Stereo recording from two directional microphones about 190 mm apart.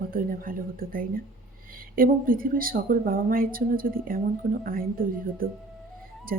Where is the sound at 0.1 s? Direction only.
50° right (ahead or behind).